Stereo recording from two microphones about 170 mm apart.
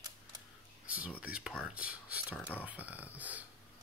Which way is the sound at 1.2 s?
5° right (ahead or behind).